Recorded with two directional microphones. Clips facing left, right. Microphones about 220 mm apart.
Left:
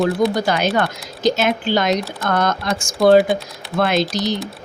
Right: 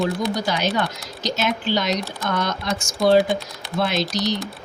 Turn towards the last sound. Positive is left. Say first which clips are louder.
# left 4 dB
turn(degrees=50)  # may be behind; listen again after turning